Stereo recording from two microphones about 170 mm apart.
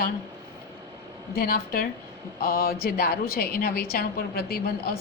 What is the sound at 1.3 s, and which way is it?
A woman's voice, 60° left (ahead or behind).